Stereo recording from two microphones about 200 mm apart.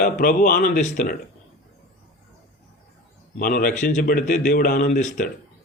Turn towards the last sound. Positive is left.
turn(degrees=40)  # may be behind; listen again after turning